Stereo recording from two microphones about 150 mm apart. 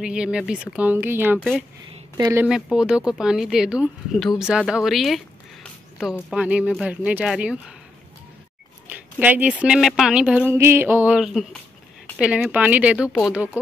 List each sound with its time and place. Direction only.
0.0 s speech: 5° right (ahead or behind)
8.8 s speech: 10° right (ahead or behind)
10.5 s speech: 15° right (ahead or behind)